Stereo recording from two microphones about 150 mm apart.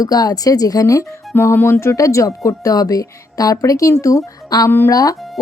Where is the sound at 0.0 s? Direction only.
25° left (ahead or behind).